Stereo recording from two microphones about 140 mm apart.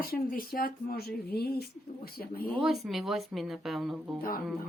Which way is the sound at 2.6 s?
Centre (ahead or behind).